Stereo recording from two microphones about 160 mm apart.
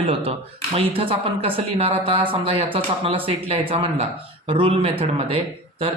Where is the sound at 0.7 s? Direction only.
35° right (ahead or behind).